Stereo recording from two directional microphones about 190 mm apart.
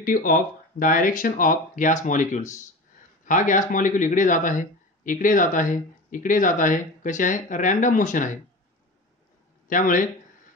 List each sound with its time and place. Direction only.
0.0 s speech: 45° left (ahead or behind)
9.7 s speech: 45° left (ahead or behind)